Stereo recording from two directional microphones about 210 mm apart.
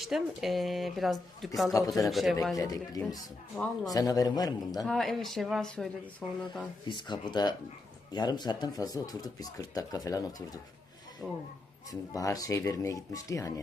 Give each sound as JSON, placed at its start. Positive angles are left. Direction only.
{"t": 0.0, "sound": "speech", "side_deg": 0}
{"t": 2.6, "sound": "speech", "side_deg": 15}
{"t": 4.9, "sound": "speech", "side_deg": 0}
{"t": 6.8, "sound": "speech", "side_deg": 20}
{"t": 11.2, "sound": "speech", "side_deg": 0}
{"t": 11.9, "sound": "speech", "side_deg": 15}